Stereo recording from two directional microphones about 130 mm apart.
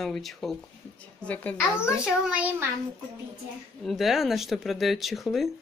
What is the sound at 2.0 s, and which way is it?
Speech, 10° right (ahead or behind).